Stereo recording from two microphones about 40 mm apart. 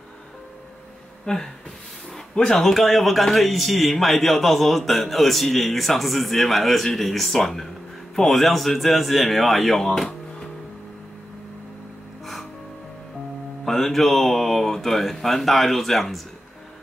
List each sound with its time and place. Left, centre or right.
1.2 s speech: centre
2.5 s a man's voice: centre
13.7 s speech: centre